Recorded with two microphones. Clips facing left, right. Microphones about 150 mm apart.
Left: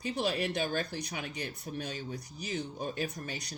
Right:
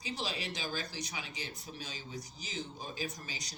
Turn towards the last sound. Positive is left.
turn(degrees=60)  # may be behind; listen again after turning